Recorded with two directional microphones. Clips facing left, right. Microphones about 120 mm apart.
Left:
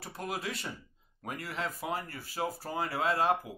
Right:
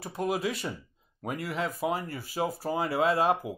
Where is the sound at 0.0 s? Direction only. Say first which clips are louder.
Right 8 dB; 15° right (ahead or behind).